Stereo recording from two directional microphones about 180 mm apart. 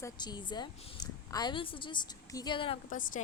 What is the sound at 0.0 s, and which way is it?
A woman's voice, 25° left (ahead or behind).